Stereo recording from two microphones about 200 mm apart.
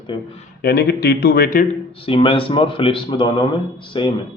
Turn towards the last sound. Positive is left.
turn(degrees=25)  # may be behind; listen again after turning